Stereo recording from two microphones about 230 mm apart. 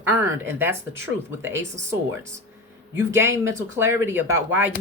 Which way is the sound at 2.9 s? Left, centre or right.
Centre.